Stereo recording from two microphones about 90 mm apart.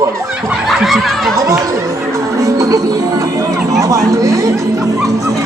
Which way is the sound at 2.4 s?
35° right (ahead or behind).